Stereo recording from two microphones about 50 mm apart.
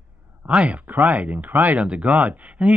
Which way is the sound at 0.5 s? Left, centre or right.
Right.